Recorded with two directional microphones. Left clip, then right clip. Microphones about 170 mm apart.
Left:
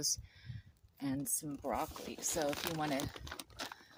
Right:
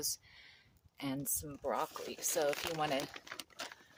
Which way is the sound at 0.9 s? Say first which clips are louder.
Left 1 dB; 35° right (ahead or behind).